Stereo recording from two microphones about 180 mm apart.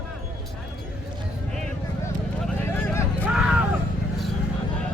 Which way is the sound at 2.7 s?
10° left (ahead or behind).